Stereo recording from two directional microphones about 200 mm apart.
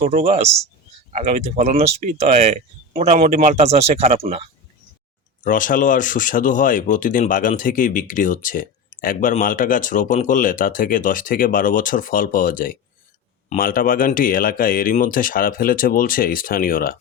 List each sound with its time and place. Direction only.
0.0 s speech: 45° right (ahead or behind)
0.3 s speech: 30° right (ahead or behind)
1.1 s speech: 45° right (ahead or behind)
5.4 s speech: 40° left (ahead or behind)